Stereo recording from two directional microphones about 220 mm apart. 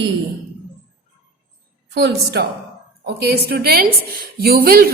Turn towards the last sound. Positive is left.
turn(degrees=-45)  # may be behind; listen again after turning